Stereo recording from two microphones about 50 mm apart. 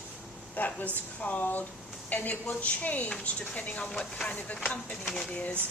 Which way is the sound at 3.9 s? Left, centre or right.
Centre.